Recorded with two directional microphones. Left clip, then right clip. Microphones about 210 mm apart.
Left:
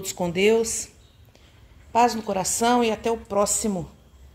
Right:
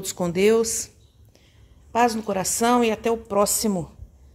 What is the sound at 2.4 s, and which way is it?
Speech, 35° right (ahead or behind).